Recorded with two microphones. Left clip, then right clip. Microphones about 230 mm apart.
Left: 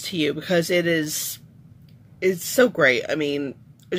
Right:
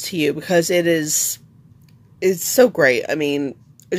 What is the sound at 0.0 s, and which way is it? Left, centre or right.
Speech, right.